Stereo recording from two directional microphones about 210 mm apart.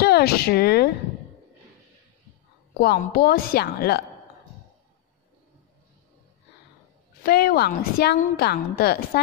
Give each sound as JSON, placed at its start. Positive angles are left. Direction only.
{"t": 0.0, "sound": "speech", "side_deg": 50}
{"t": 2.8, "sound": "a woman's voice", "side_deg": 45}
{"t": 7.2, "sound": "a woman's voice", "side_deg": 45}